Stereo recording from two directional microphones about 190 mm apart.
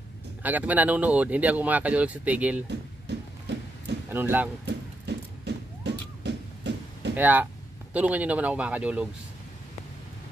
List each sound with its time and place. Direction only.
0.4 s speech: 10° right (ahead or behind)
4.1 s speech: 10° right (ahead or behind)
4.6 s a sound: 60° right (ahead or behind)
7.2 s speech: 10° right (ahead or behind)